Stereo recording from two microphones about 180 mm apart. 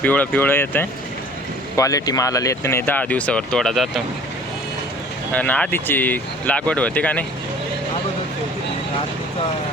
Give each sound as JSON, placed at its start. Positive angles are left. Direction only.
{"t": 0.0, "sound": "speech", "side_deg": 10}
{"t": 5.3, "sound": "speech", "side_deg": 10}